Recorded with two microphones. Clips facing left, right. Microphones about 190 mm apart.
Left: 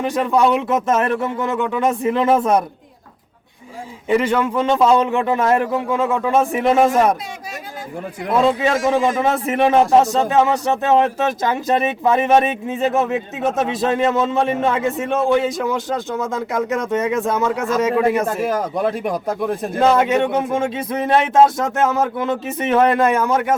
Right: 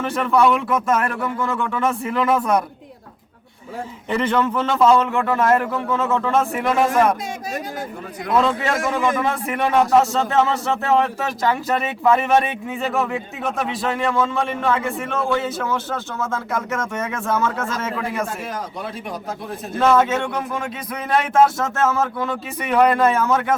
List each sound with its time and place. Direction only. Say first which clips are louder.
0.0 s speech: left 1 dB; 15° left (ahead or behind)
4.1 s a man's voice: left 3 dB; 10° left (ahead or behind)
8.4 s a man's voice: left 5 dB; 15° left (ahead or behind)
9.0 s a man's voice: left 3 dB; 30° left (ahead or behind)
18.3 s speech: left 9 dB; 50° left (ahead or behind)
20.0 s speech: left 3 dB; 15° left (ahead or behind)